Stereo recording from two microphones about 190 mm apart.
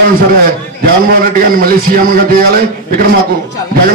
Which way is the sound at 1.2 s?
50° right (ahead or behind).